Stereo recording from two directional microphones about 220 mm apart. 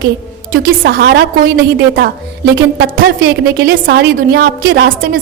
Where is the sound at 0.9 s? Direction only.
45° right (ahead or behind).